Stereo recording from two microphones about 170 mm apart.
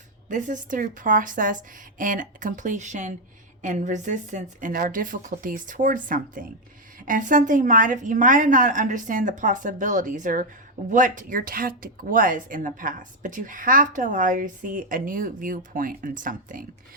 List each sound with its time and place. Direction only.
0.3 s speech: 50° right (ahead or behind)